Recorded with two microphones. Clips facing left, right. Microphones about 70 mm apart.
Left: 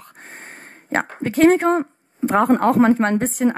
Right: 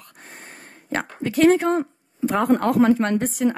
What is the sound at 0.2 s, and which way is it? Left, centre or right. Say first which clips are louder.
Speech: left 3 dB; left.